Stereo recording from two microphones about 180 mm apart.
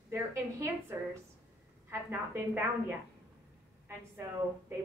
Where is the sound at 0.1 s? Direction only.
15° right (ahead or behind).